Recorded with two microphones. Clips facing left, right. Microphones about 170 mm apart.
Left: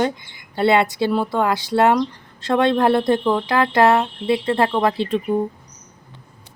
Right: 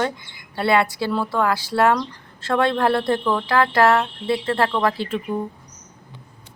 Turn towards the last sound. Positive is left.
turn(degrees=20)  # may be behind; listen again after turning